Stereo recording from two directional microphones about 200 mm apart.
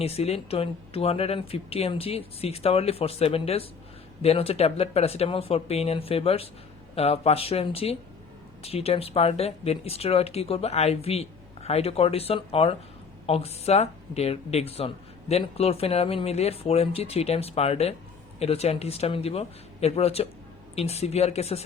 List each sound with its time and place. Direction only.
0.0 s a woman's voice: 30° left (ahead or behind)